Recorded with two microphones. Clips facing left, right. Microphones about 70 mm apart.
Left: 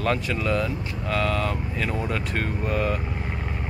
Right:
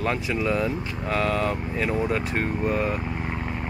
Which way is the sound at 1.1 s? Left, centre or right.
Right.